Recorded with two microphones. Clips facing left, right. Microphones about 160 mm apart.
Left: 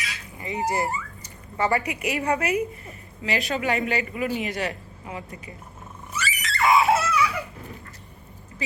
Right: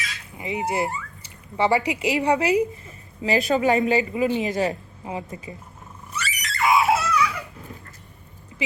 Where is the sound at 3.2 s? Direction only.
35° right (ahead or behind).